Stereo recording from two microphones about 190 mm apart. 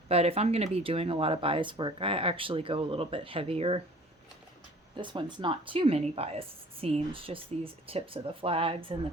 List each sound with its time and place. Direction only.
0.1 s speech: 30° right (ahead or behind)
4.9 s speech: 25° right (ahead or behind)